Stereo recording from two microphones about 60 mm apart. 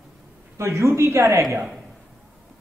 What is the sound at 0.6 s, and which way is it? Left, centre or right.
Speech, right.